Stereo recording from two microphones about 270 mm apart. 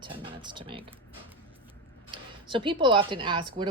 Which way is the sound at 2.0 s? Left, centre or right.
Centre.